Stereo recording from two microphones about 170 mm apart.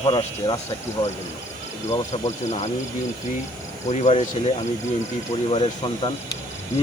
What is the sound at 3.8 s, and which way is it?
Speech, 40° left (ahead or behind).